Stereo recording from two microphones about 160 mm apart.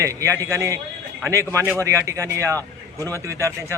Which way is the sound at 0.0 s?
20° right (ahead or behind).